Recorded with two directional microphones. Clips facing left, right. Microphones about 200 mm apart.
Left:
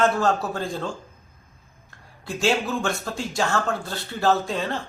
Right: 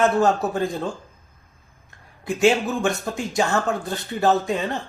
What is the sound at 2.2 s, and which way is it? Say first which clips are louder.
Speech: right 5 dB; 20° right (ahead or behind).